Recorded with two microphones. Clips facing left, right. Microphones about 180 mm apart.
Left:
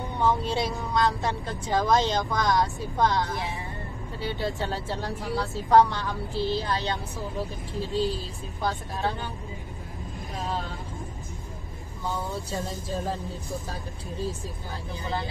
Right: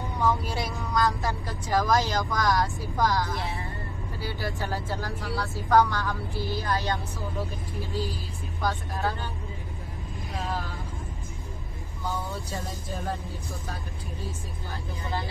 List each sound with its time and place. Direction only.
0.2 s speech: 25° left (ahead or behind)
12.4 s speech: 25° left (ahead or behind)